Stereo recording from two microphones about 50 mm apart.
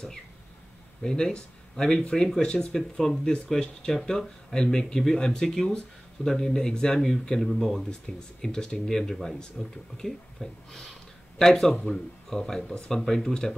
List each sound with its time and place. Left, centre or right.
1.0 s speech: centre
7.9 s speech: centre